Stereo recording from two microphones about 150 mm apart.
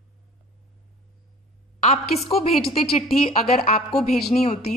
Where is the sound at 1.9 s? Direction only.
40° left (ahead or behind).